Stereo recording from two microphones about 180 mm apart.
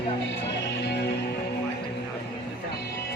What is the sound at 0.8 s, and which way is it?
Music, 70° left (ahead or behind).